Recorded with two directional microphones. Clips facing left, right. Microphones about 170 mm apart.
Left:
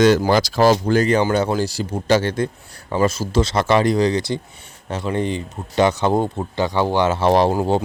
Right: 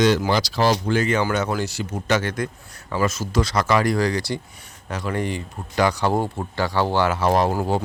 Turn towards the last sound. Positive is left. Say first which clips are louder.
# left 4 dB
turn(degrees=20)  # may be behind; listen again after turning